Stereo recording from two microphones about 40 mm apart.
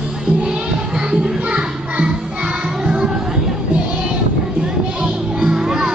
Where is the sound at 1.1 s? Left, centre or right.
Right.